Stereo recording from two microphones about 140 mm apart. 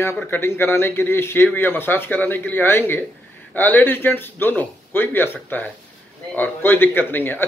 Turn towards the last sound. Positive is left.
turn(degrees=15)  # may be behind; listen again after turning